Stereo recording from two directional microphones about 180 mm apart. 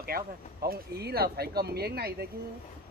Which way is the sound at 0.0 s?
55° right (ahead or behind).